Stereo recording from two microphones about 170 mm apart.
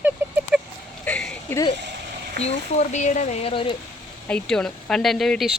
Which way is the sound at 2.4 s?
40° left (ahead or behind).